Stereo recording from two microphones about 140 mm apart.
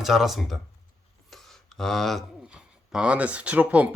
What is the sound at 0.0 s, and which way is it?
Speech, centre (ahead or behind).